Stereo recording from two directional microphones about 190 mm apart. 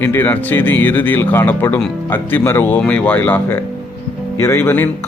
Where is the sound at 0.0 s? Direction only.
10° left (ahead or behind).